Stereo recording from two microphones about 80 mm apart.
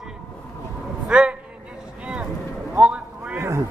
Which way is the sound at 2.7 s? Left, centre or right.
Centre.